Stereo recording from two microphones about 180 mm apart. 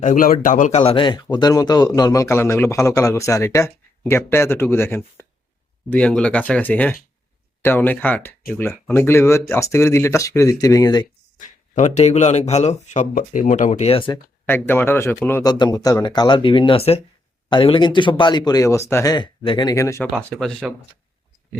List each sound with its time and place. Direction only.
0.0 s speech: 45° left (ahead or behind); by 11.0 s 20° left (ahead or behind)
11.7 s speech: 40° left (ahead or behind)
14.4 s speech: 10° left (ahead or behind)
20.3 s speech: centre (ahead or behind)